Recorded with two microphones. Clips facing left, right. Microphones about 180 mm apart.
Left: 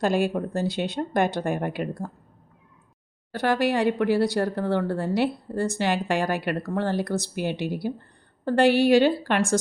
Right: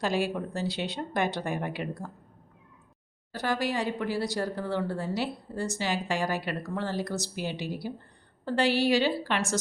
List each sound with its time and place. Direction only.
0.0 s speech: 50° left (ahead or behind)
3.3 s speech: 60° left (ahead or behind)